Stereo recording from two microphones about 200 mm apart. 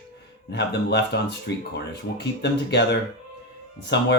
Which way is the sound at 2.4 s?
60° left (ahead or behind).